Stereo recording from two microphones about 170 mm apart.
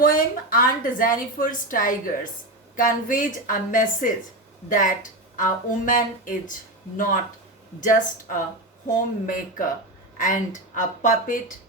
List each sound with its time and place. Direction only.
0.0 s a woman's voice: 55° left (ahead or behind)
5.4 s speech: 50° left (ahead or behind)